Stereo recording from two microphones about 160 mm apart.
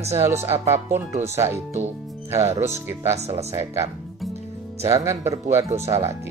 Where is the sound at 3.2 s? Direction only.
40° right (ahead or behind).